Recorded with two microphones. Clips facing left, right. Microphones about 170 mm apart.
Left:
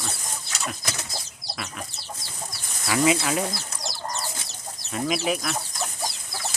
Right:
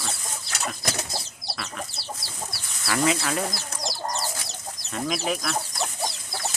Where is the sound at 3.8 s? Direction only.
35° right (ahead or behind).